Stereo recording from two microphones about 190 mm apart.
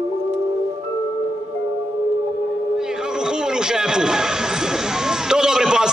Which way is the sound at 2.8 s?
5° right (ahead or behind).